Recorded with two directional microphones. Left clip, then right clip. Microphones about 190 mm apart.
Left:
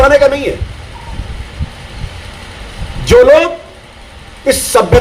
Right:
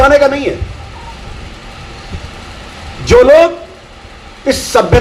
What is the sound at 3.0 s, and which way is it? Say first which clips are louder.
A man's voice: right 1 dB; 50° left (ahead or behind).